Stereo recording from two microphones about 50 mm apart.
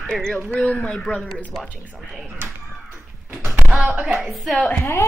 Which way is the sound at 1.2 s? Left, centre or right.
Centre.